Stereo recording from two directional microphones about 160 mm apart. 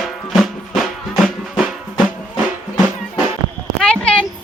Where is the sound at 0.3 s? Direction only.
Centre (ahead or behind).